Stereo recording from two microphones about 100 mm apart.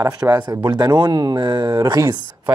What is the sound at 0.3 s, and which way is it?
Speech, 40° right (ahead or behind).